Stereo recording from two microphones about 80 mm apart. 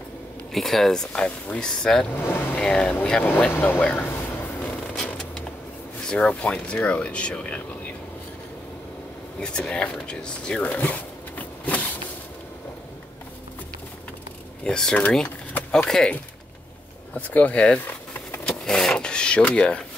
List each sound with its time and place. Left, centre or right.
0.5 s speech: centre
2.0 s speech: left
2.5 s speech: centre
5.1 s a sound: centre
6.0 s speech: centre
9.4 s speech: centre
14.6 s speech: centre
15.9 s speech: centre
17.3 s speech: centre
18.4 s vehicle: centre